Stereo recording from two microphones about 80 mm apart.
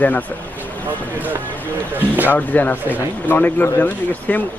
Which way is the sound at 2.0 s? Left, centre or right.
Right.